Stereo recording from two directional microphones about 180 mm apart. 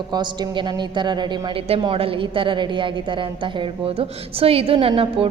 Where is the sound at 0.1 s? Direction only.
25° right (ahead or behind).